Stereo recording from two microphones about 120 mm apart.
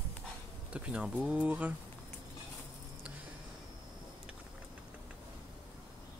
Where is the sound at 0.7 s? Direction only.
10° right (ahead or behind).